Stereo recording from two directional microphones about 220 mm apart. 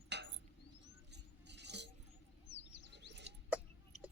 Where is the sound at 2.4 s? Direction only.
50° left (ahead or behind).